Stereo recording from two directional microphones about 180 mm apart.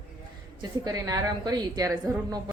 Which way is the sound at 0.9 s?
20° right (ahead or behind).